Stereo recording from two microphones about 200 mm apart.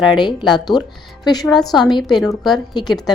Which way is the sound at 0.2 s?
20° left (ahead or behind).